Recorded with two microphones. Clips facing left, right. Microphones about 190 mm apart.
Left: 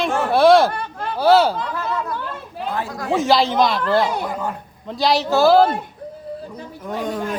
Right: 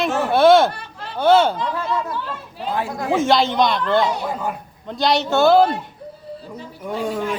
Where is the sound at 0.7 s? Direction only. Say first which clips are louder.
Left 7 dB; 50° left (ahead or behind).